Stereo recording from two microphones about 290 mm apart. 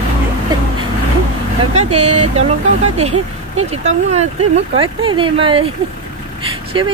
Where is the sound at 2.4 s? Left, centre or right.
Right.